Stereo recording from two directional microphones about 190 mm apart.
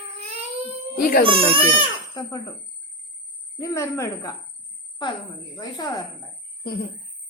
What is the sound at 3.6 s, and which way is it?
Speech, 15° left (ahead or behind).